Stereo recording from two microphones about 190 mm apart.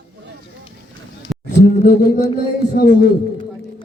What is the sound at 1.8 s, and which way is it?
Speech, 55° left (ahead or behind).